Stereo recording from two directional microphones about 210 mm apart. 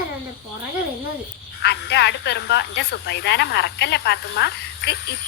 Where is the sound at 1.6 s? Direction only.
50° left (ahead or behind).